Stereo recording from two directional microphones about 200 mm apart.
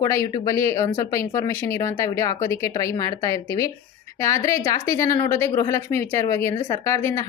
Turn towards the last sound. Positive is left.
turn(degrees=15)  # may be behind; listen again after turning